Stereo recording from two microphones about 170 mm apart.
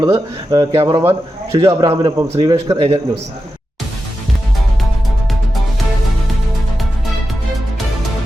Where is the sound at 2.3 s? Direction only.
25° right (ahead or behind).